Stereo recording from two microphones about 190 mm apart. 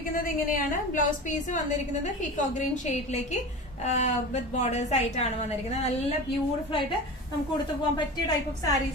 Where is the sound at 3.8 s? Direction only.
40° left (ahead or behind).